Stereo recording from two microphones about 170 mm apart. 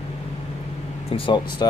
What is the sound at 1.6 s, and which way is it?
Speech, 25° left (ahead or behind).